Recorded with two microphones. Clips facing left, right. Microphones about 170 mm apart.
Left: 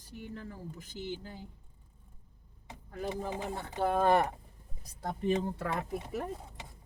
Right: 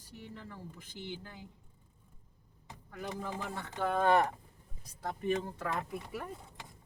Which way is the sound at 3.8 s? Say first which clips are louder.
Left 1 dB; 35° left (ahead or behind).